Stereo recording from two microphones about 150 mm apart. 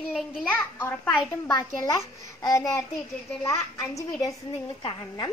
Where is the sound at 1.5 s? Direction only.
25° left (ahead or behind).